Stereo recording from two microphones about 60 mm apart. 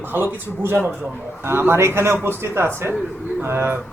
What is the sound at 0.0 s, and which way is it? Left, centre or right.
Speech, right.